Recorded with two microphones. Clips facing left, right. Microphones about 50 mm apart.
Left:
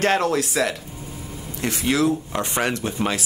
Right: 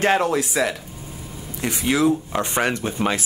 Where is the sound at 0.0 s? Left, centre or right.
Centre.